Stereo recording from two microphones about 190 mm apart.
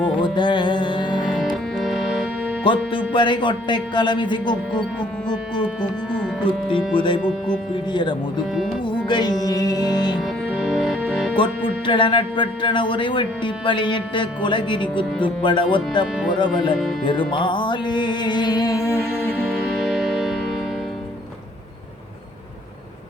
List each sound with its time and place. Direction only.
0.0 s music: 25° left (ahead or behind)
1.3 s music: centre (ahead or behind)
2.7 s speech: 25° left (ahead or behind)
6.4 s speech: 25° left (ahead or behind)
8.8 s music: 25° left (ahead or behind)
10.5 s music: 5° right (ahead or behind)
11.3 s speech: 25° left (ahead or behind)
17.1 s music: 25° left (ahead or behind)
19.5 s music: centre (ahead or behind)